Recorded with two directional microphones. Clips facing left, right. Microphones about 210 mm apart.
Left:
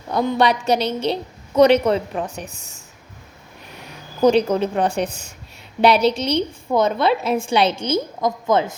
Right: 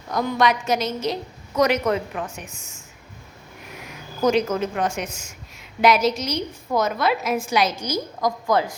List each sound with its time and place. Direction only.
0.1 s a woman's voice: 30° left (ahead or behind)